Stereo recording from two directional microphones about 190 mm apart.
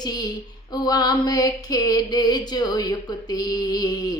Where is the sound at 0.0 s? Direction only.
20° left (ahead or behind).